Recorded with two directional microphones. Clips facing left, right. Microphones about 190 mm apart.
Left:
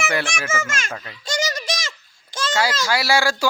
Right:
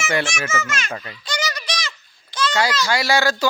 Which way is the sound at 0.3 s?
50° left (ahead or behind).